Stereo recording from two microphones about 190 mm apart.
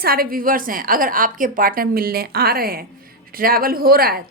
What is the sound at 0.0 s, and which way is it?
A woman's voice, 50° right (ahead or behind).